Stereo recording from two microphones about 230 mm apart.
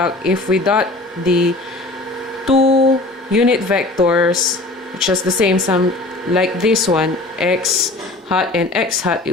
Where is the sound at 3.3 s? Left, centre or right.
Centre.